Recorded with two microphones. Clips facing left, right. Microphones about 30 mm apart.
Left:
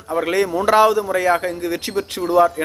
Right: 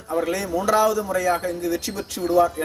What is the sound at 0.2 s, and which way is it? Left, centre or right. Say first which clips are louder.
Speech: left 5 dB; left.